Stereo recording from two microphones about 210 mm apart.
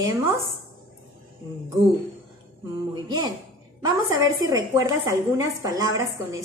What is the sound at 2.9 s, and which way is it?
A woman's voice, 20° right (ahead or behind).